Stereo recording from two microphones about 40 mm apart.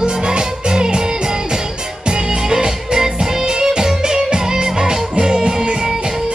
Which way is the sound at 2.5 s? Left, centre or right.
Centre.